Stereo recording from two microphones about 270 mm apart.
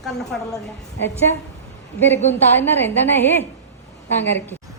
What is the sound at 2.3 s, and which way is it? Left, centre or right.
A woman's voice, centre.